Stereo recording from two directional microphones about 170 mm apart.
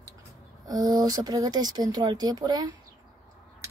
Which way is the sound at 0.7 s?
20° right (ahead or behind).